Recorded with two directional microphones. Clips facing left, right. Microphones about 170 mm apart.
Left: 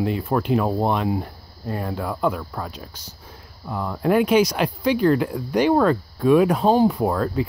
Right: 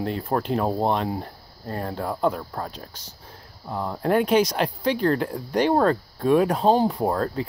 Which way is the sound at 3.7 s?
30° right (ahead or behind).